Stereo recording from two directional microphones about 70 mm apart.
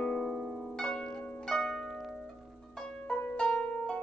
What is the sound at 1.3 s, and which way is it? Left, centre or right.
Harp, centre.